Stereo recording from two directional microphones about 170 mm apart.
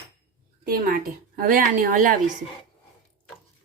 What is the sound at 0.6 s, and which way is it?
A woman's voice, 60° right (ahead or behind).